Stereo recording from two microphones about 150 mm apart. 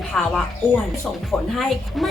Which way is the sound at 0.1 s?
5° left (ahead or behind).